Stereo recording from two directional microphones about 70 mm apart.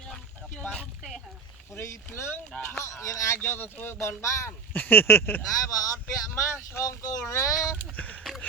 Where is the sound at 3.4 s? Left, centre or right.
Left.